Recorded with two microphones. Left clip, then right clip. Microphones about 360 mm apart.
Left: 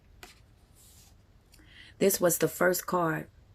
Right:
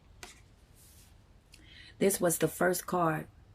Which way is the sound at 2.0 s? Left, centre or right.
Centre.